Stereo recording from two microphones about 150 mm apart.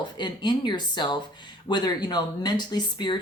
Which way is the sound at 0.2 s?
30° left (ahead or behind).